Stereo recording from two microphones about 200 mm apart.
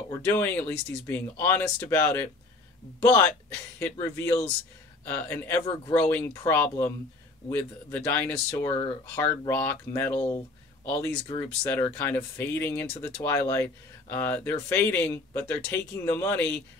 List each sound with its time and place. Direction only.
0.1 s speech: 15° left (ahead or behind)
3.8 s speech: 15° left (ahead or behind)